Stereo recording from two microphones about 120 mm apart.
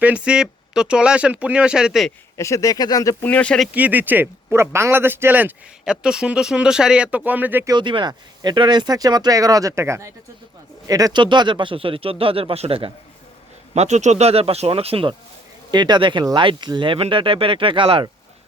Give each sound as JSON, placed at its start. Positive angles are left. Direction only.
{"t": 0.0, "sound": "speech", "side_deg": -10}
{"t": 2.4, "sound": "speech", "side_deg": 25}
{"t": 3.2, "sound": "speech", "side_deg": 10}
{"t": 3.8, "sound": "speech", "side_deg": -15}
{"t": 7.7, "sound": "speech", "side_deg": -40}
{"t": 13.7, "sound": "speech", "side_deg": -70}
{"t": 15.7, "sound": "speech", "side_deg": -40}